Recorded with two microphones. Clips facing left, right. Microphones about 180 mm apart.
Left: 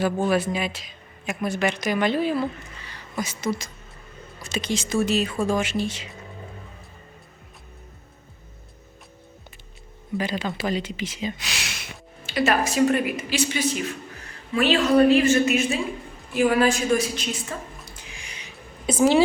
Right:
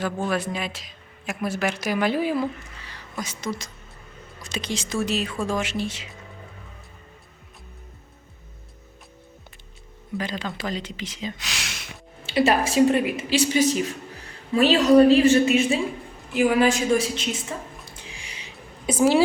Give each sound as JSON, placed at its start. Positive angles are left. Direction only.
{"t": 0.3, "sound": "speech", "side_deg": 0}
{"t": 3.2, "sound": "speech", "side_deg": 5}
{"t": 10.2, "sound": "speech", "side_deg": 10}
{"t": 12.2, "sound": "a woman's voice", "side_deg": -30}
{"t": 16.3, "sound": "a woman's voice", "side_deg": -15}
{"t": 18.2, "sound": "music", "side_deg": -30}
{"t": 18.9, "sound": "a woman's voice", "side_deg": -10}